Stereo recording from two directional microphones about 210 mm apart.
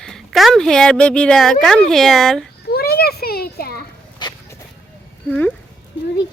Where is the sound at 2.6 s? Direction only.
45° left (ahead or behind).